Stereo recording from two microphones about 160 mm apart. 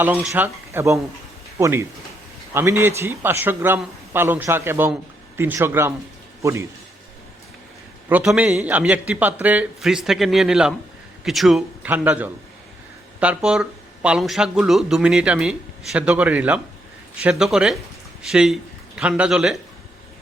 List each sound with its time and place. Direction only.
0.0 s speech: 10° right (ahead or behind)
8.1 s a man's voice: 5° right (ahead or behind)